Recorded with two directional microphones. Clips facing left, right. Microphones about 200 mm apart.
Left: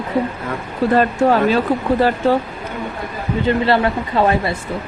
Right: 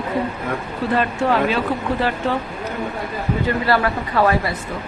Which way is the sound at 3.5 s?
25° left (ahead or behind).